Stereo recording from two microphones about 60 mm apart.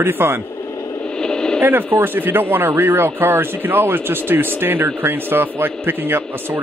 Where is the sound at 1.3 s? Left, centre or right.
Centre.